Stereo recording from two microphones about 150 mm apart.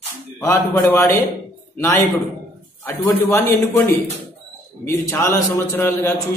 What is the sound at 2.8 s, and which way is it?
A man's voice, 15° left (ahead or behind).